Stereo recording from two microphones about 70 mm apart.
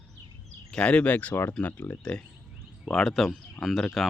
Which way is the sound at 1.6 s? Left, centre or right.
Left.